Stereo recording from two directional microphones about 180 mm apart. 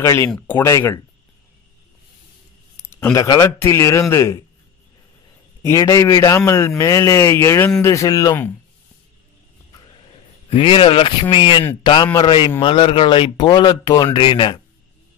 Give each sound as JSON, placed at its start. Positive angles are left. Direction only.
{"t": 0.0, "sound": "a man's voice", "side_deg": 15}
{"t": 2.8, "sound": "a man's voice", "side_deg": 15}
{"t": 5.6, "sound": "a man's voice", "side_deg": 20}
{"t": 10.5, "sound": "a man's voice", "side_deg": 30}